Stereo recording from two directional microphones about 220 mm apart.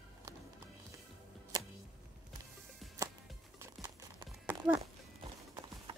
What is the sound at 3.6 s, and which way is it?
Music, 20° right (ahead or behind).